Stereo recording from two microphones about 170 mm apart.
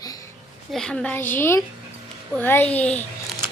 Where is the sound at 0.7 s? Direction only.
5° left (ahead or behind).